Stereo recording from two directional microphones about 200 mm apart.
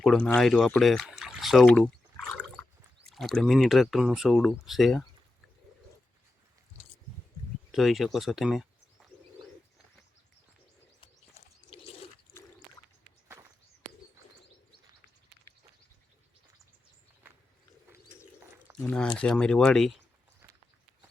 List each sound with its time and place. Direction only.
0.0 s speech: 5° left (ahead or behind)
2.3 s a sound: 5° left (ahead or behind)
3.1 s speech: centre (ahead or behind)
7.7 s speech: centre (ahead or behind)
11.0 s bird: 30° left (ahead or behind)
18.8 s speech: 5° left (ahead or behind)